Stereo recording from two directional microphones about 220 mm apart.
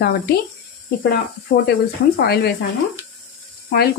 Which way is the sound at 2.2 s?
45° left (ahead or behind).